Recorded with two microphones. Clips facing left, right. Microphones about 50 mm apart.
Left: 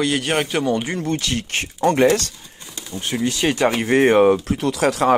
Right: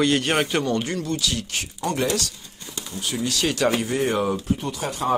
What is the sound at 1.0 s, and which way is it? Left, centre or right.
Speech, left.